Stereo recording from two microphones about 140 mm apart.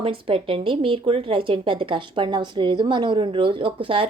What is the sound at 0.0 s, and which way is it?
Speech, 40° right (ahead or behind).